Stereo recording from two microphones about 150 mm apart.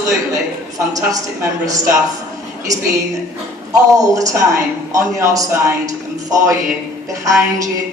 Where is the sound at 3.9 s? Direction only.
20° right (ahead or behind).